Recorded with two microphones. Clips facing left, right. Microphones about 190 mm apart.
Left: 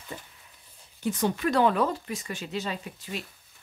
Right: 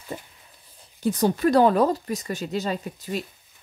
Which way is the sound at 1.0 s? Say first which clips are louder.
Right 6 dB; 35° right (ahead or behind).